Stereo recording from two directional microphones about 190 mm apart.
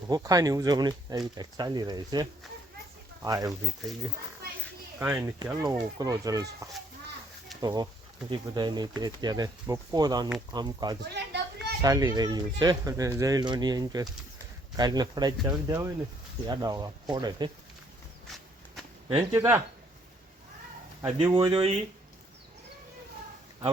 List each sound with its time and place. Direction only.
0.1 s speech: 20° right (ahead or behind)
3.2 s speech: 20° right (ahead or behind)
4.9 s speech: 10° right (ahead or behind)
11.0 s a sound: 60° right (ahead or behind)
11.8 s speech: 20° right (ahead or behind)
19.1 s speech: 15° right (ahead or behind)
21.2 s speech: 20° right (ahead or behind)